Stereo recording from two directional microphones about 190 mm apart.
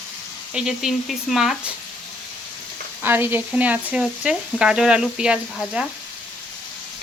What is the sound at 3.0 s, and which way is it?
Speech, 10° right (ahead or behind).